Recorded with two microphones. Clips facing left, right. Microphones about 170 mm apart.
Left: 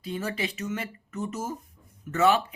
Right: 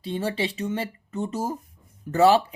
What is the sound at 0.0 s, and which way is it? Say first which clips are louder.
Speech: right 4 dB; 30° right (ahead or behind).